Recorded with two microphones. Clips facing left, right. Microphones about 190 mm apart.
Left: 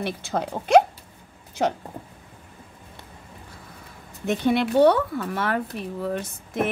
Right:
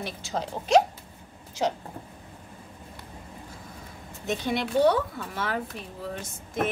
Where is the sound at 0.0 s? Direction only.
55° left (ahead or behind).